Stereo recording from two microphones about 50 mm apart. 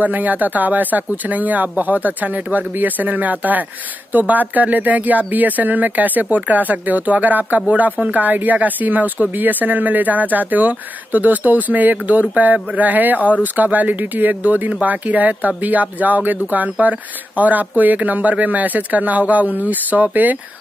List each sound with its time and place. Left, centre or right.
0.0 s speech: right